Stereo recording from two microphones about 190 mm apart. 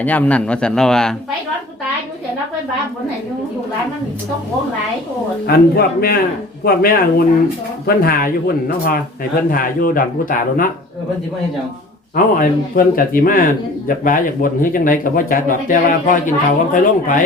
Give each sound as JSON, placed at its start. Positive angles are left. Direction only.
{"t": 0.0, "sound": "a man's voice", "side_deg": 10}
{"t": 5.5, "sound": "speech", "side_deg": 50}
{"t": 12.1, "sound": "speech", "side_deg": 50}